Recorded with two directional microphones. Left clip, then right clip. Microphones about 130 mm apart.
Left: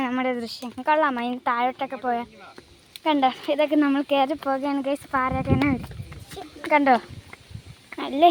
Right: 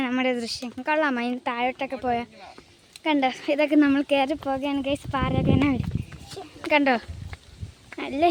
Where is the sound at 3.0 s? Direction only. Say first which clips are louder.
Left 2 dB; 10° right (ahead or behind); by 5.7 s 30° right (ahead or behind).